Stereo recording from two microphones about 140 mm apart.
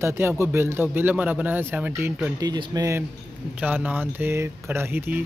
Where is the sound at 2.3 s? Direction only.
30° right (ahead or behind).